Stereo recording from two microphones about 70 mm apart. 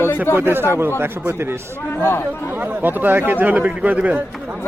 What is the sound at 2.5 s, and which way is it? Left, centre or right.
A man's voice, right.